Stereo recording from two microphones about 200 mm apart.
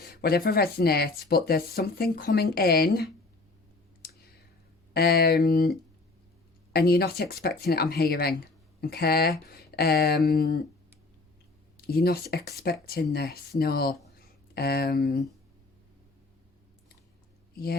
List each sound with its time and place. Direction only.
0.0 s speech: 50° left (ahead or behind)
4.9 s speech: 50° left (ahead or behind)
6.7 s speech: 50° left (ahead or behind)
11.8 s speech: 50° left (ahead or behind)